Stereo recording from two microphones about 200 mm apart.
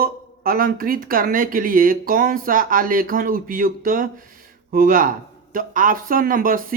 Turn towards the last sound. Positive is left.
turn(degrees=-45)  # may be behind; listen again after turning